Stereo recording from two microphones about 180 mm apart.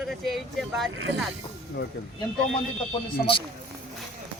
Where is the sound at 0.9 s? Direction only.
90° right.